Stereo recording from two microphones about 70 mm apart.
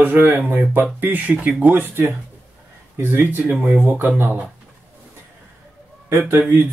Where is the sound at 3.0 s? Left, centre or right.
Right.